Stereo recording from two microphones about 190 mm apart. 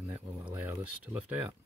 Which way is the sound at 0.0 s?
10° right (ahead or behind).